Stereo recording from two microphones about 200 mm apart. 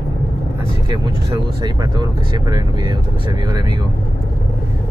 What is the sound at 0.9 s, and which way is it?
Speech, 20° right (ahead or behind).